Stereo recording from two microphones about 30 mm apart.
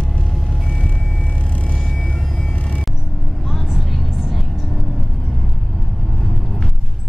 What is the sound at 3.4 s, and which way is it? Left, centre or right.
Vehicle, centre.